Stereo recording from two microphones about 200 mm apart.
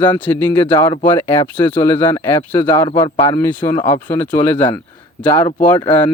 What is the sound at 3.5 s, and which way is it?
A man's voice, 10° left (ahead or behind).